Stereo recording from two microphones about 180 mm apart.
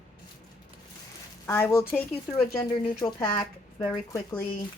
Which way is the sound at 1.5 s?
15° left (ahead or behind).